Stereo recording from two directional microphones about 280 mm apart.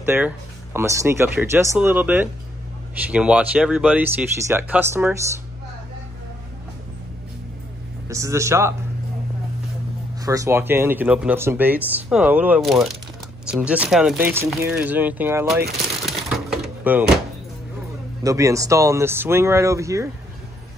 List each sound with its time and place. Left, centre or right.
0.0 s speech: centre
8.1 s speech: centre
10.2 s speech: centre
16.2 s a sound: centre
18.2 s speech: centre